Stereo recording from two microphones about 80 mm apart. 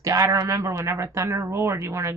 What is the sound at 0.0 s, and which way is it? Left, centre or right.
A man's voice, right.